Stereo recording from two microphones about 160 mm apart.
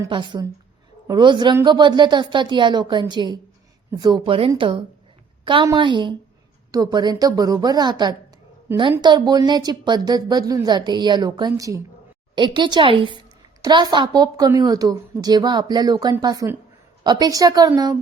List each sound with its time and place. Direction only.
0.1 s a woman's voice: 30° right (ahead or behind)